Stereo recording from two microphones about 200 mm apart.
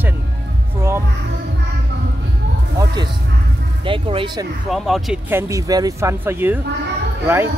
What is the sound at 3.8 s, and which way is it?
Speech, 25° right (ahead or behind).